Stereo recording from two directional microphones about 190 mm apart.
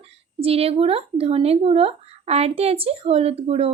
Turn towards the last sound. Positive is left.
turn(degrees=-30)  # may be behind; listen again after turning